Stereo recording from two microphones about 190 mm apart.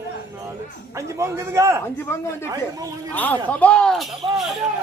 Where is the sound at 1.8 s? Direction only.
15° left (ahead or behind).